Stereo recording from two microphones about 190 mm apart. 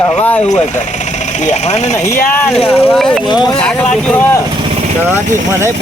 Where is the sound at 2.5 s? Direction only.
30° left (ahead or behind).